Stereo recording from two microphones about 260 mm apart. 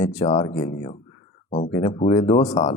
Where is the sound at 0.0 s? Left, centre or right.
Centre.